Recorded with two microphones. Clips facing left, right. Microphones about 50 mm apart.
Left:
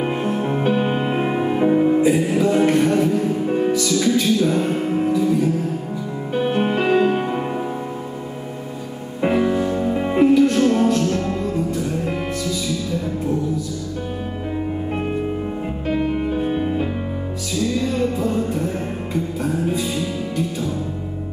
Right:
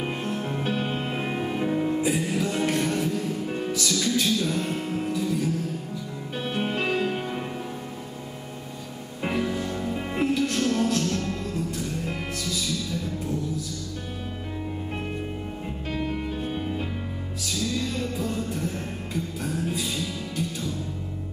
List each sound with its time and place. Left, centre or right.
0.0 s music: centre
2.0 s music: centre
9.2 s music: centre
10.2 s music: centre
15.9 s music: centre